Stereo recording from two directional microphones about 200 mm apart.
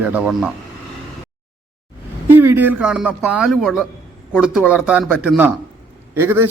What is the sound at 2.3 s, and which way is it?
A man's voice, 10° right (ahead or behind).